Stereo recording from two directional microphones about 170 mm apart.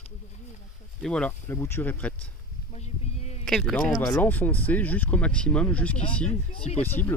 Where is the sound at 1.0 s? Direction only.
5° left (ahead or behind).